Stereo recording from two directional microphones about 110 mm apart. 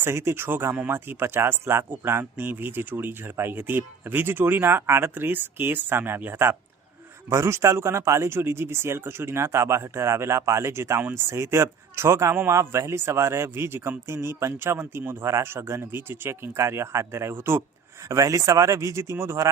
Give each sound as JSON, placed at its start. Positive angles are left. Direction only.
{"t": 0.0, "sound": "speech", "side_deg": -25}